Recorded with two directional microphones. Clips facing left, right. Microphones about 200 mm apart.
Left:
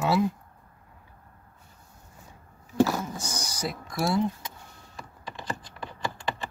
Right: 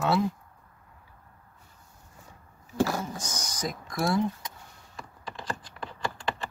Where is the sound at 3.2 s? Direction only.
10° left (ahead or behind).